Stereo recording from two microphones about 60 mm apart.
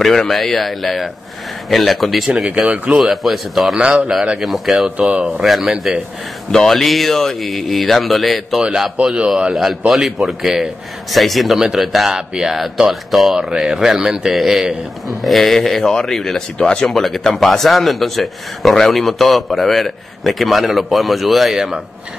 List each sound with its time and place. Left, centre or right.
0.0 s a man's voice: centre
2.3 s speech: centre
3.0 s a man's voice: centre
8.9 s a man's voice: centre
9.5 s a man's voice: centre